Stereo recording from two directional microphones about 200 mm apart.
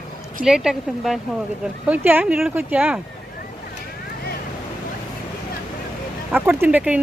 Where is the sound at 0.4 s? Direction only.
5° right (ahead or behind).